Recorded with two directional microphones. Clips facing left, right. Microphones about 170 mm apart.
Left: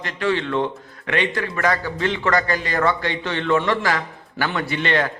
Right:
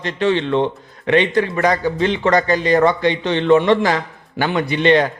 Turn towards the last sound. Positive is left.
turn(degrees=-20)  # may be behind; listen again after turning